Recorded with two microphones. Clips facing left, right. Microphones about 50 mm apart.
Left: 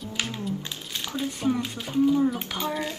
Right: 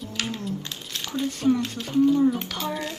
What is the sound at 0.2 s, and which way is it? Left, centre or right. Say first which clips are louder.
Music: right 1 dB; centre.